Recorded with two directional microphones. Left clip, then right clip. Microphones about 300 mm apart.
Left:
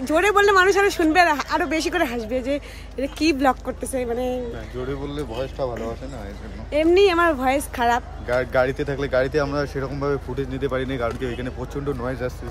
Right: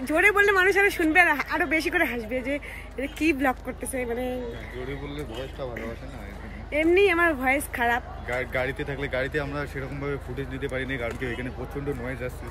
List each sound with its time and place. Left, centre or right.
0.0 s speech: centre